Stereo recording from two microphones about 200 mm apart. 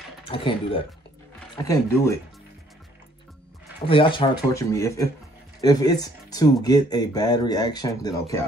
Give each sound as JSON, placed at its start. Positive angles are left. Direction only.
{"t": 0.2, "sound": "speech", "side_deg": 25}
{"t": 3.8, "sound": "speech", "side_deg": 25}